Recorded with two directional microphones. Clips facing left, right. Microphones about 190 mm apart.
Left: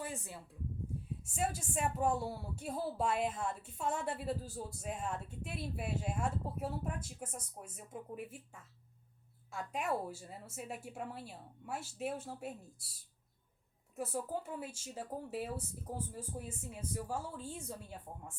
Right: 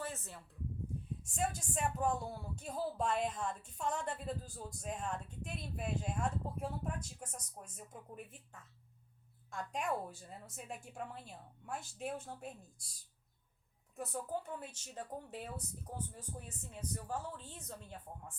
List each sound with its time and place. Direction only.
0.0 s a sound: 15° left (ahead or behind)
1.2 s speech: 5° left (ahead or behind)
9.5 s speech: 5° left (ahead or behind)
13.9 s speech: 5° left (ahead or behind)